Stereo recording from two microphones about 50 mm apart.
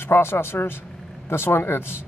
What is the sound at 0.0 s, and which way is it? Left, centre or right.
Speech, left.